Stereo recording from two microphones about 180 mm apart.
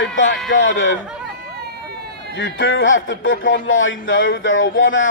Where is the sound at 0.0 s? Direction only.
90° left.